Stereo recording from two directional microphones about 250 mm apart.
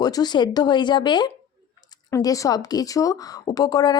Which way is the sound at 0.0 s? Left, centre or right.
Centre.